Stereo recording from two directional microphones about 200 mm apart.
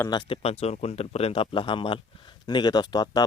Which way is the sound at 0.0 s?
20° left (ahead or behind).